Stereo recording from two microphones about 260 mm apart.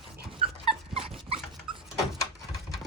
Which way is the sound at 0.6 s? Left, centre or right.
Centre.